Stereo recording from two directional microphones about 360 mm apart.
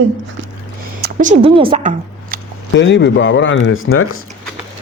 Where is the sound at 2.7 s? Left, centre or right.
Left.